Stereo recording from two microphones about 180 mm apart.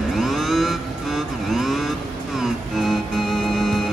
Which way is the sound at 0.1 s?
Centre (ahead or behind).